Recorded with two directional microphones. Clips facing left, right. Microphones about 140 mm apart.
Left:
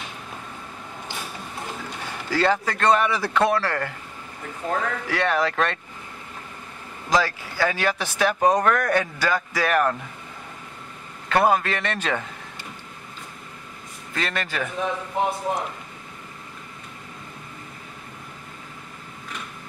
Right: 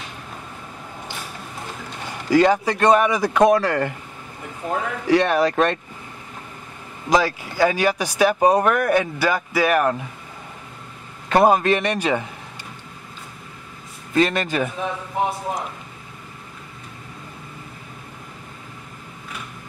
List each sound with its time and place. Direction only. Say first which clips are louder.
2.2 s speech: right 6 dB; 15° right (ahead or behind)
7.1 s speech: right 3 dB; 15° right (ahead or behind)
11.2 s speech: right 5 dB; 20° right (ahead or behind)
14.1 s a man's voice: right 9 dB; 20° right (ahead or behind)